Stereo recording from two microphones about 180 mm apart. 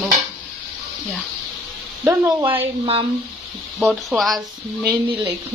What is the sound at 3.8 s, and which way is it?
Speech, centre (ahead or behind).